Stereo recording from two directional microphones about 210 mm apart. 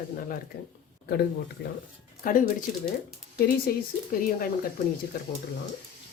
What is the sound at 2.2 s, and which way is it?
Speech, 40° left (ahead or behind).